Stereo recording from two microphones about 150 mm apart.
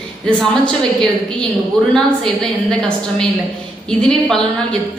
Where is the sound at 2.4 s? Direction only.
5° left (ahead or behind).